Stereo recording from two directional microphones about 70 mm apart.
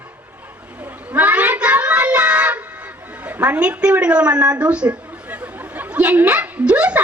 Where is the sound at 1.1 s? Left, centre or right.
Right.